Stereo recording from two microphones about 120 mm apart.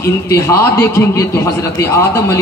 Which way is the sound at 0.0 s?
25° left (ahead or behind).